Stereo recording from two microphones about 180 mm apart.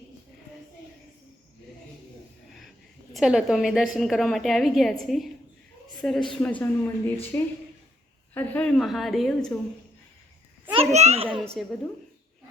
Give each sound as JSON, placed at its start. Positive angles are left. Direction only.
{"t": 3.1, "sound": "a woman's voice", "side_deg": 0}
{"t": 10.7, "sound": "a child's voice", "side_deg": -35}
{"t": 11.3, "sound": "a woman's voice", "side_deg": 0}